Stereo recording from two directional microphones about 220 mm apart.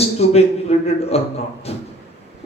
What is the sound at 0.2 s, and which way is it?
A man's voice, 30° left (ahead or behind).